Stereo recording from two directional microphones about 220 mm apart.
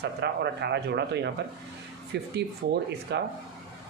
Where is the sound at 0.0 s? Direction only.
50° right (ahead or behind).